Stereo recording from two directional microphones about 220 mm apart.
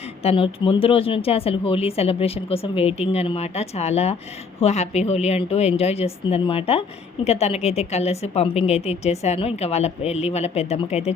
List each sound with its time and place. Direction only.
0.2 s speech: 25° left (ahead or behind)